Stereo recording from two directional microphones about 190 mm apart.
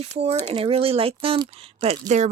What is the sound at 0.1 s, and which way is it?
Speech, 35° right (ahead or behind).